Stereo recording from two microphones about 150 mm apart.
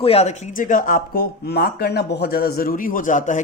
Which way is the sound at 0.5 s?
60° left (ahead or behind).